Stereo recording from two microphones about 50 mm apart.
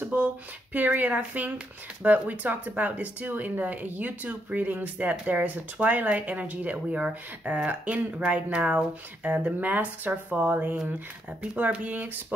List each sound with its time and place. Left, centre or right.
0.7 s speech: right